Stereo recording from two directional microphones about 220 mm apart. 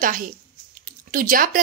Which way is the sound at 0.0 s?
40° right (ahead or behind).